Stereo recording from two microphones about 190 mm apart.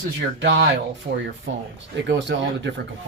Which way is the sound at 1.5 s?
75° right (ahead or behind).